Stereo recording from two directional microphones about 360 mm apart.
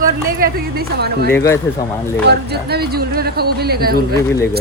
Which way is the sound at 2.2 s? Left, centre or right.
Right.